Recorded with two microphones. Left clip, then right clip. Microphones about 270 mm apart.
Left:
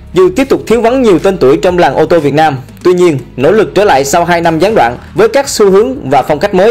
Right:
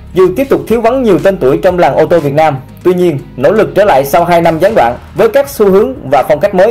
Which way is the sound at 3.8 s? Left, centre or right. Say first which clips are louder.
Even; left.